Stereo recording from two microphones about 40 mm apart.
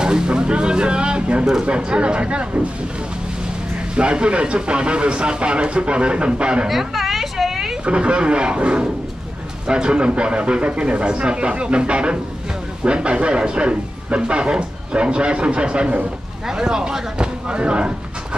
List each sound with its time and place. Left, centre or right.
0.0 s speech: right
3.9 s speech: right
6.7 s a sound: centre
7.8 s speech: right
16.4 s speech: centre